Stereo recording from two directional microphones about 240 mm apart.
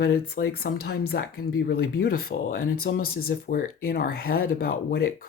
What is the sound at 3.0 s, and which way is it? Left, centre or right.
Speech, left.